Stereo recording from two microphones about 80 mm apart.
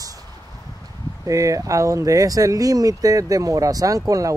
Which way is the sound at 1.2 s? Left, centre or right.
Right.